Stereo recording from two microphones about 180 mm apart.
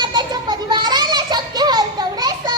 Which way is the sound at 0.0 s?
25° right (ahead or behind).